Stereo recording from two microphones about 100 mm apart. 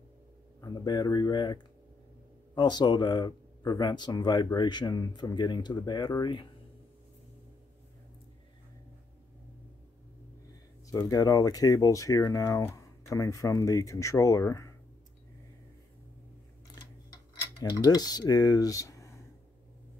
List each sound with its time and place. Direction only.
0.6 s speech: 45° left (ahead or behind)
11.0 s speech: 40° left (ahead or behind)
17.6 s speech: 40° left (ahead or behind)